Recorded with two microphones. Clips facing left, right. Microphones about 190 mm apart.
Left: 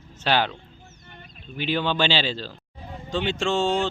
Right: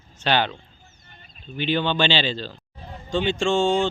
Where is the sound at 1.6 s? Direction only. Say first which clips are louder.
Right 2 dB; 5° left (ahead or behind).